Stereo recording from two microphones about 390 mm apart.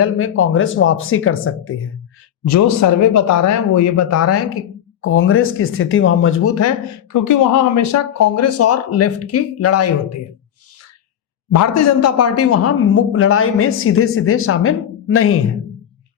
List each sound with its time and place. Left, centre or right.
0.0 s speech: left
2.4 s speech: left
11.5 s speech: left